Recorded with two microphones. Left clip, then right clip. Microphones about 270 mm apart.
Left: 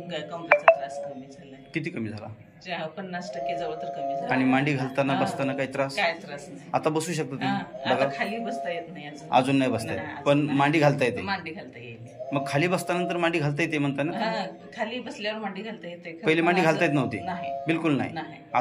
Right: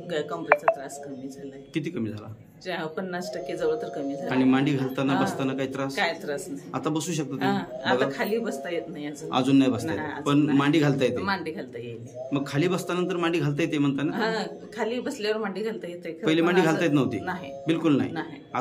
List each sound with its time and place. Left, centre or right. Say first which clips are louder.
1.7 s a man's voice: right 1 dB; centre
6.0 s speech: even; centre
6.7 s a man's voice: left 4 dB; centre